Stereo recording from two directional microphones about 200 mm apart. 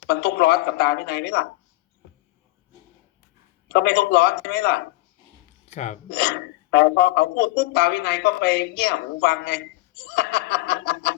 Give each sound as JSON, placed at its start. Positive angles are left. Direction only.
{"t": 0.1, "sound": "speech", "side_deg": 55}
{"t": 3.7, "sound": "speech", "side_deg": 55}
{"t": 5.6, "sound": "speech", "side_deg": 35}
{"t": 6.1, "sound": "speech", "side_deg": 55}